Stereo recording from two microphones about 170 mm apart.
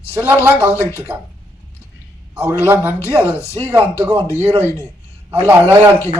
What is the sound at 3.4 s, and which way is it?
Speech, 15° left (ahead or behind).